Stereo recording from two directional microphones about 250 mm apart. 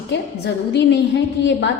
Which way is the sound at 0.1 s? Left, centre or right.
Left.